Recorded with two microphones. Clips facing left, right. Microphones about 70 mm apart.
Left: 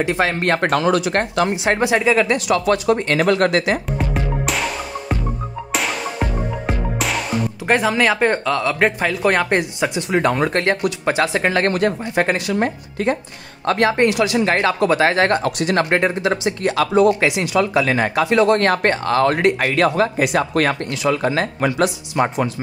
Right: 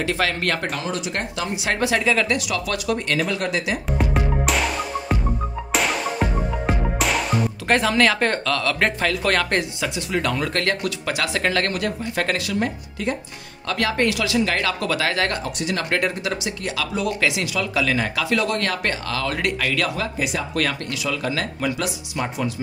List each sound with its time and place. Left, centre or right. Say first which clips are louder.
0.0 s speech: left 4 dB; left
0.6 s speech: left 9 dB; left
0.8 s speech: left 10 dB; left
1.1 s speech: left 8 dB; left
1.5 s speech: left 5 dB; left
2.3 s speech: left 7 dB; left
3.2 s speech: left 8 dB; left
4.0 s music: even; centre
7.6 s speech: left 2 dB; centre; by 12.5 s left
12.5 s speech: left 4 dB; left